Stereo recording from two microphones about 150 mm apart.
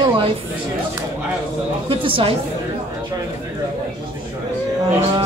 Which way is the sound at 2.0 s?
35° right (ahead or behind).